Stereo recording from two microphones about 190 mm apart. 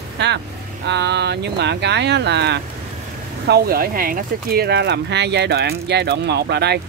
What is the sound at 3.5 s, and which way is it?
Speech, 50° right (ahead or behind).